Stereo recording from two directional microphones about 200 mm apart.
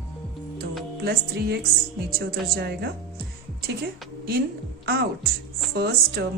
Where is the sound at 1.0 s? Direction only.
50° right (ahead or behind).